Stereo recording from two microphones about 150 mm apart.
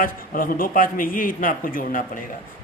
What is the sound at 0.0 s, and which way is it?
Speech, 70° left (ahead or behind).